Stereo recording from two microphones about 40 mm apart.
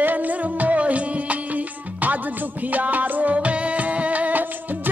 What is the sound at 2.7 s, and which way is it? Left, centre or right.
Music, right.